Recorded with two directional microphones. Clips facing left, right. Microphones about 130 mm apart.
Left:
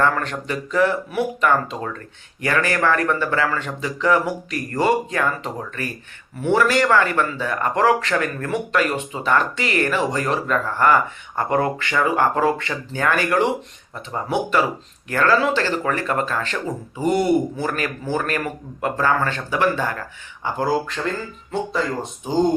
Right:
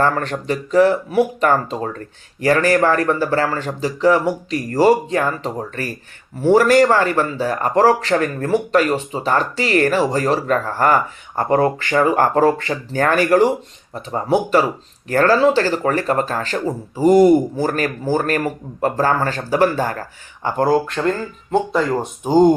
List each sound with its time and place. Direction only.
0.0 s speech: 35° right (ahead or behind); by 21.0 s 50° right (ahead or behind)